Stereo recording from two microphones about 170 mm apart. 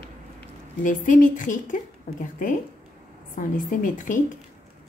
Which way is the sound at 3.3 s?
50° left (ahead or behind).